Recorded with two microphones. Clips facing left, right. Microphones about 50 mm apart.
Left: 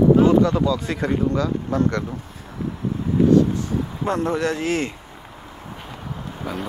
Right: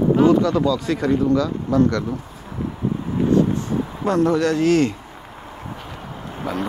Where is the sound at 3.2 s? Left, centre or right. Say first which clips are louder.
Left 1 dB; right.